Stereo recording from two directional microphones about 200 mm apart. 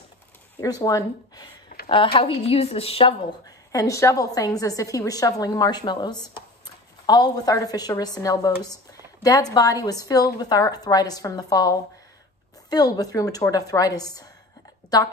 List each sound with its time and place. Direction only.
0.6 s speech: 15° left (ahead or behind)
1.7 s a sound: 45° left (ahead or behind)
2.1 s a woman's voice: 30° left (ahead or behind)